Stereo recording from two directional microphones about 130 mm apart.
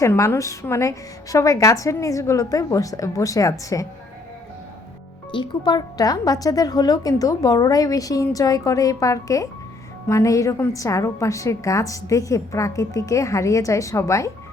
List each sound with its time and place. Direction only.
0.0 s speech: 20° left (ahead or behind)
5.3 s speech: 35° left (ahead or behind)